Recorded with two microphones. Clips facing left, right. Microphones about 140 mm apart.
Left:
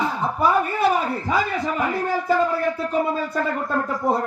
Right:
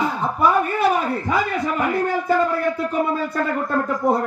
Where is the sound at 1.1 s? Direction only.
Centre (ahead or behind).